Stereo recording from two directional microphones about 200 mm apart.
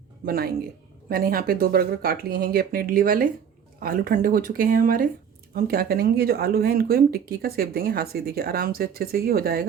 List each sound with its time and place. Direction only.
0.3 s speech: 50° right (ahead or behind)